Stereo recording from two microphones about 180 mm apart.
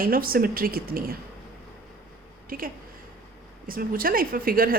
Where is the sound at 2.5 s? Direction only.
50° right (ahead or behind).